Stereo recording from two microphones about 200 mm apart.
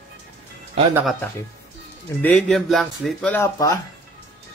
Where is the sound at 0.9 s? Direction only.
5° right (ahead or behind).